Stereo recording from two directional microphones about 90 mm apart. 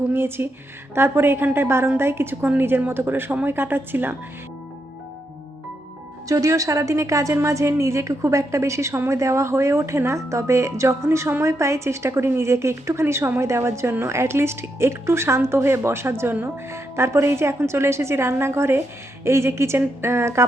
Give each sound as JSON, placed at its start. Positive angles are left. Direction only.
{"t": 0.1, "sound": "speech", "side_deg": -25}
{"t": 6.2, "sound": "a woman's voice", "side_deg": -35}